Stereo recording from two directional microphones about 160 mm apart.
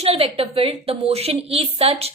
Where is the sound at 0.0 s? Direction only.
35° right (ahead or behind).